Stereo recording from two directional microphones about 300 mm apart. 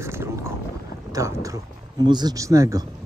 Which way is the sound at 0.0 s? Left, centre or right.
Centre.